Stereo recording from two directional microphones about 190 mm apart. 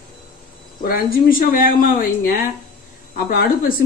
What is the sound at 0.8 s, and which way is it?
Speech, 50° left (ahead or behind).